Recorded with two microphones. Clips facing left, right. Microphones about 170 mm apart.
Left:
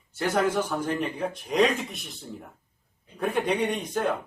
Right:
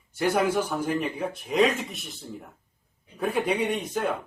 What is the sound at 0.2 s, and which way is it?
A man's voice, 10° right (ahead or behind).